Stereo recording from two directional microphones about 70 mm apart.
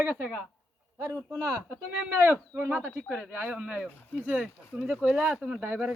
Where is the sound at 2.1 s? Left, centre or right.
Right.